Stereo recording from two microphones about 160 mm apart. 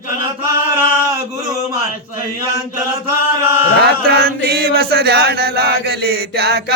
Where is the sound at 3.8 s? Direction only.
80° right.